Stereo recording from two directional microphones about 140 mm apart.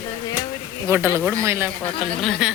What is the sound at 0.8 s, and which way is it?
Speech, 20° right (ahead or behind).